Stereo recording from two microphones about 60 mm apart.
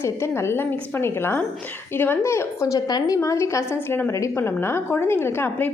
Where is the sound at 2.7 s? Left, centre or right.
Left.